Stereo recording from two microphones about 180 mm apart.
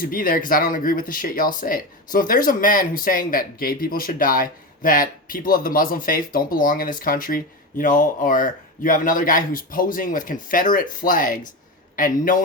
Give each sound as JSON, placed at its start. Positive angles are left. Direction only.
{"t": 0.0, "sound": "speech", "side_deg": 55}